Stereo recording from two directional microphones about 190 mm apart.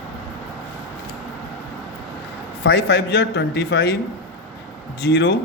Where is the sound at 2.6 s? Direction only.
65° left (ahead or behind).